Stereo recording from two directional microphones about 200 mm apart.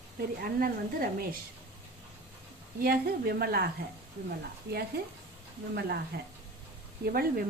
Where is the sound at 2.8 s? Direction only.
50° right (ahead or behind).